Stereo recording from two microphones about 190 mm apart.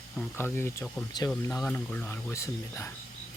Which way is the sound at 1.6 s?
5° left (ahead or behind).